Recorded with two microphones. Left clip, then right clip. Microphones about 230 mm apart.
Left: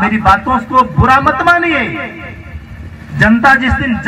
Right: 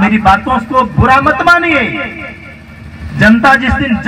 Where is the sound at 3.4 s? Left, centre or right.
Right.